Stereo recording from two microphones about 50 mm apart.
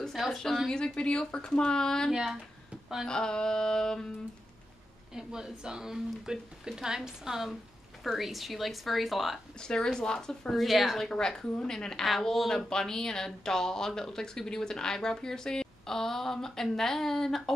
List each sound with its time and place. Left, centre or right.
0.1 s a woman's voice: centre
0.7 s speech: centre
3.1 s speech: centre
5.1 s speech: centre
9.6 s speech: centre